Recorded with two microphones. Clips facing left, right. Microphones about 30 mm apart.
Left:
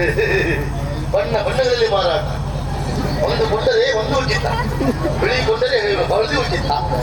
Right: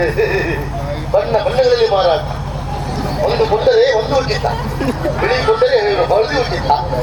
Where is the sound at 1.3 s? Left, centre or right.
Centre.